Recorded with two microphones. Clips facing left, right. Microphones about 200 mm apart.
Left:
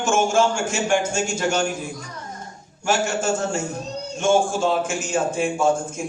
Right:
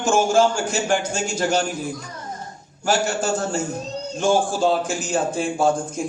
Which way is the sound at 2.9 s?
35° right (ahead or behind).